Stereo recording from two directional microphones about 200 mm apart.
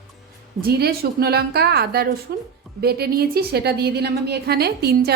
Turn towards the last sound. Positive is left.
turn(degrees=-55)  # may be behind; listen again after turning